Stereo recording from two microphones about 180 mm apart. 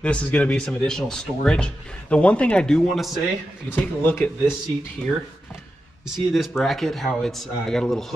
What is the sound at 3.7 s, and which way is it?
Speech, 10° left (ahead or behind).